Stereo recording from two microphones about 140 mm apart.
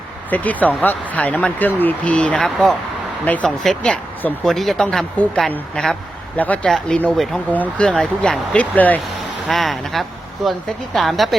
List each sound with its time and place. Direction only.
0.3 s speech: 10° left (ahead or behind)